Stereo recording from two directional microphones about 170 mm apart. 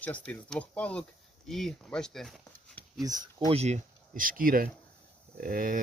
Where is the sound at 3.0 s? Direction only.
20° right (ahead or behind).